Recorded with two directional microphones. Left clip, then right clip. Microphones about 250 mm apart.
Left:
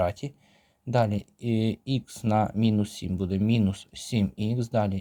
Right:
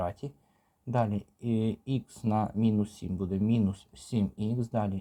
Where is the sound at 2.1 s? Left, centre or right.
Left.